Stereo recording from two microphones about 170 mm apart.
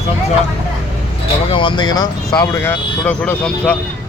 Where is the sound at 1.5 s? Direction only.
30° left (ahead or behind).